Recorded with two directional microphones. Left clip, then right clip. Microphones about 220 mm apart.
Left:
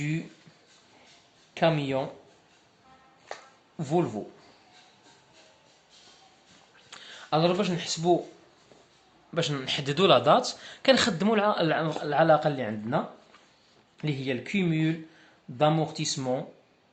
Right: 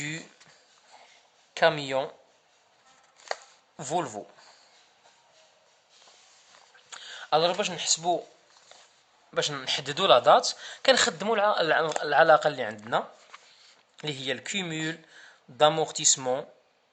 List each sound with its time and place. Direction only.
1.5 s speech: 45° right (ahead or behind)
3.8 s speech: 45° right (ahead or behind)
6.9 s speech: 40° right (ahead or behind)
9.3 s speech: 35° right (ahead or behind)
14.0 s speech: 45° right (ahead or behind)